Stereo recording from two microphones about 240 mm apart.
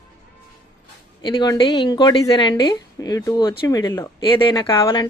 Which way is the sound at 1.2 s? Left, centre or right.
Centre.